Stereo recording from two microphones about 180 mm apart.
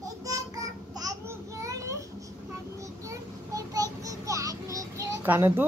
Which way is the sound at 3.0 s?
20° right (ahead or behind).